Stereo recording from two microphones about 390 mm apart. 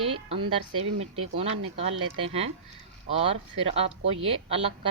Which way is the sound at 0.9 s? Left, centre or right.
Right.